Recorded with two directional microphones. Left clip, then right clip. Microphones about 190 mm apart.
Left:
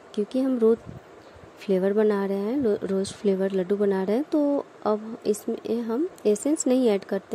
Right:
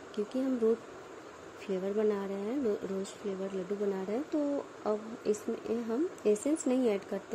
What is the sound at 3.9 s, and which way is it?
Speech, 30° left (ahead or behind).